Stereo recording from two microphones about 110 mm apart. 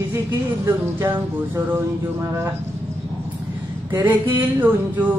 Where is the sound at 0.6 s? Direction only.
20° right (ahead or behind).